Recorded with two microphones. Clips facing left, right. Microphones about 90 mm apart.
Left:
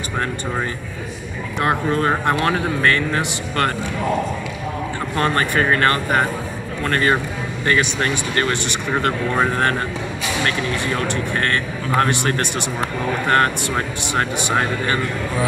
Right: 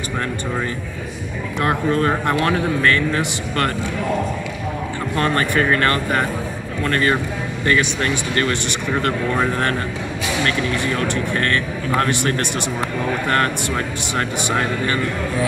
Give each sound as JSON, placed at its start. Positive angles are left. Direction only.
{"t": 1.6, "sound": "speech", "side_deg": 20}
{"t": 5.1, "sound": "speech", "side_deg": 20}
{"t": 11.9, "sound": "speech", "side_deg": 20}